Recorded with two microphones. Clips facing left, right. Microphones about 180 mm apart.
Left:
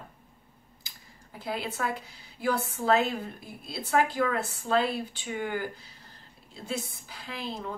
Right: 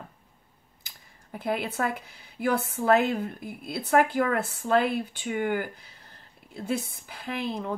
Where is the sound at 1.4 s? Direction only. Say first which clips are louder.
Right 4 dB; 55° right (ahead or behind).